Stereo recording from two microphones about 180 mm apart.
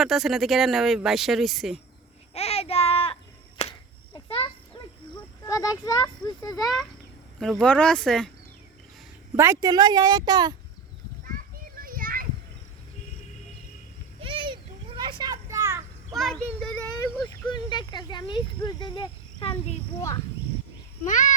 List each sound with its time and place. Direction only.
0.0 s speech: centre (ahead or behind)
2.3 s child singing: 35° left (ahead or behind)
3.6 s a sound: 35° left (ahead or behind)
5.8 s speech: 20° left (ahead or behind)
7.6 s speech: 5° left (ahead or behind)
9.3 s speech: 15° right (ahead or behind)
11.8 s children playing: 50° right (ahead or behind)
14.2 s children playing: 30° right (ahead or behind)
16.1 s a sound: 5° left (ahead or behind)
17.5 s speech: 25° left (ahead or behind)
21.1 s a child's voice: 45° left (ahead or behind)